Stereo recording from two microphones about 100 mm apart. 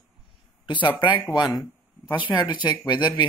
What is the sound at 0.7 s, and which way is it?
Speech, 55° left (ahead or behind).